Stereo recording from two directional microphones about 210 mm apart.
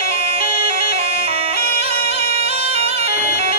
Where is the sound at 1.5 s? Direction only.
30° right (ahead or behind).